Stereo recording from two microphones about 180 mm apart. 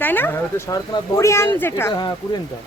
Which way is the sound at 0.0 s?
10° left (ahead or behind).